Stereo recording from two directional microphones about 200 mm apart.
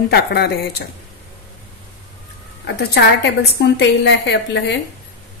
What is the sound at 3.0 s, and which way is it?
A woman's voice, 55° left (ahead or behind).